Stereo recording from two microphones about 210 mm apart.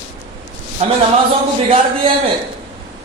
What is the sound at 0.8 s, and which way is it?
Speech, 30° right (ahead or behind).